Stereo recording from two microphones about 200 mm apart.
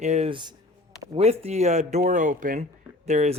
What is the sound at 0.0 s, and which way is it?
Speech, 35° right (ahead or behind).